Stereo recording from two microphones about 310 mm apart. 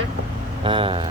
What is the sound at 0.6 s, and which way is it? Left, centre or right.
Speech, centre.